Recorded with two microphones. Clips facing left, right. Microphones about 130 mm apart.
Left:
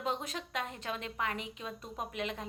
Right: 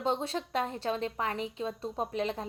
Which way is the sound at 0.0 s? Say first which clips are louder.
Right 5 dB; 30° right (ahead or behind).